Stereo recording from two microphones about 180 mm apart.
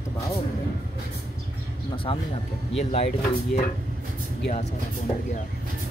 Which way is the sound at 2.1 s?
30° left (ahead or behind).